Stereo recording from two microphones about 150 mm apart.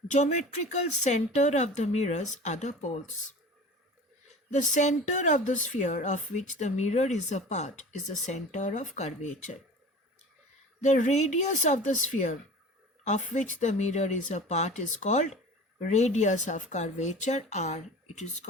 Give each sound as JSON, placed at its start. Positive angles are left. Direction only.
{"t": 0.1, "sound": "speech", "side_deg": 50}
{"t": 4.5, "sound": "a woman's voice", "side_deg": 55}
{"t": 10.8, "sound": "speech", "side_deg": 55}